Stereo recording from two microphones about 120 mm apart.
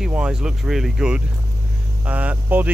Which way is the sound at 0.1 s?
5° right (ahead or behind).